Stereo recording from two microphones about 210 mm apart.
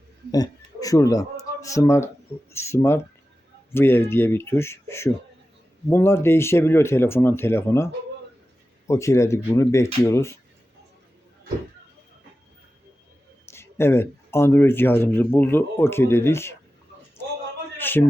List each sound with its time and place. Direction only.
0.3 s speech: 15° left (ahead or behind)
8.9 s speech: 15° left (ahead or behind)
13.5 s speech: 10° left (ahead or behind)
17.7 s a sound: 10° left (ahead or behind)